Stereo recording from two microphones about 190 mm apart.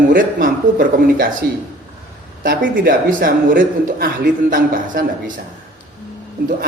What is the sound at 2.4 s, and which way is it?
Speech, 50° right (ahead or behind).